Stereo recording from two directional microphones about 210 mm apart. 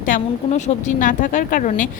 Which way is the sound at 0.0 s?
35° left (ahead or behind).